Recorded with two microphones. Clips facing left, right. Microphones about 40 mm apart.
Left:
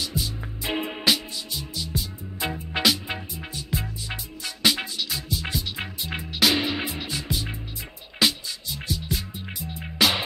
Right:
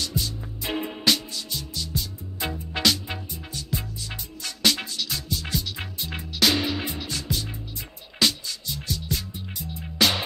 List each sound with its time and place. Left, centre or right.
0.0 s music: centre
0.7 s music: left
1.0 s music: centre